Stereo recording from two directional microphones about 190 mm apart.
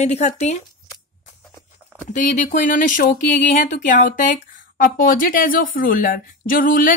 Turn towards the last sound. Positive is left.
turn(degrees=45)  # may be behind; listen again after turning